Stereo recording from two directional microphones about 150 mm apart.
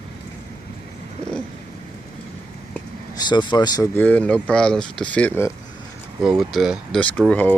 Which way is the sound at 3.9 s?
10° left (ahead or behind).